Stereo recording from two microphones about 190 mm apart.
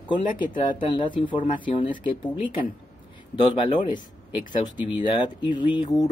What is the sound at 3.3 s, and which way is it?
Speech, 25° left (ahead or behind).